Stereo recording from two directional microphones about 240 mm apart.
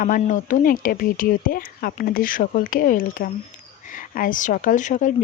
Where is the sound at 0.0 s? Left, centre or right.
Left.